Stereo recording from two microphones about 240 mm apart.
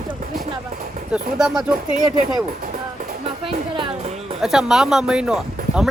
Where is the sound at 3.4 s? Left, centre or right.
Right.